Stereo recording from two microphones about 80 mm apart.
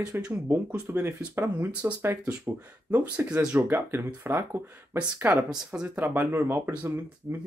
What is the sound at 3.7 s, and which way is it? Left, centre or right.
Speech, right.